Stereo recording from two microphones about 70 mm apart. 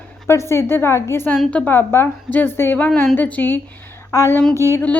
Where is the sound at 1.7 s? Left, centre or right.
Left.